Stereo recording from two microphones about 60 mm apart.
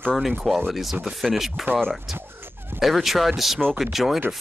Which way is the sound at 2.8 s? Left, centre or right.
Centre.